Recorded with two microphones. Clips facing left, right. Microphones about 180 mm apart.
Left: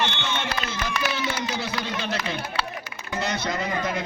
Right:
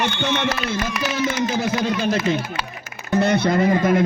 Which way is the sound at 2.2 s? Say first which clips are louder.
Right 6 dB; 45° right (ahead or behind).